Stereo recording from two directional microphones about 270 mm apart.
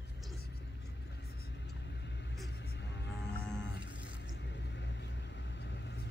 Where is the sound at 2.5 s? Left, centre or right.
Left.